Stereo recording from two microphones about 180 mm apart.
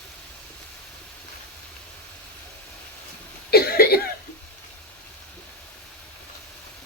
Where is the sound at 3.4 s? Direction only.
60° left (ahead or behind).